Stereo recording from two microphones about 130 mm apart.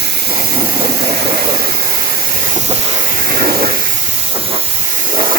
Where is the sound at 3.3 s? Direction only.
90° right.